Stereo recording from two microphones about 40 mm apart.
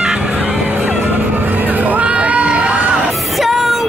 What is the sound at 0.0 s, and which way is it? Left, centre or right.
Music, right.